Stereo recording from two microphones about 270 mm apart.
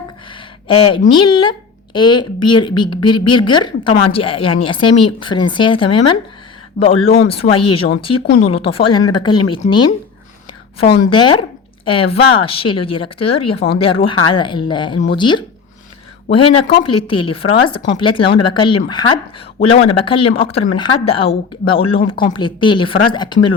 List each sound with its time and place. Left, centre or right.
0.9 s speech: centre
8.3 s speech: left
8.6 s speech: centre
11.1 s speech: centre